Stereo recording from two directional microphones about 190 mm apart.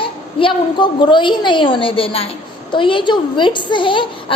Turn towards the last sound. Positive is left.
turn(degrees=25)  # may be behind; listen again after turning